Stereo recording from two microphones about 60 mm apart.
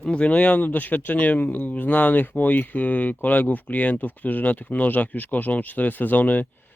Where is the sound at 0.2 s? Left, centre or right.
Left.